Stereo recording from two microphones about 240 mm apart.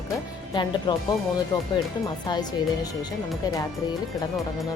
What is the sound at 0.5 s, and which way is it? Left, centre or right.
Speech, centre.